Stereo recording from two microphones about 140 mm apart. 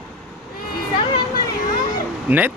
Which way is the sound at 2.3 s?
10° right (ahead or behind).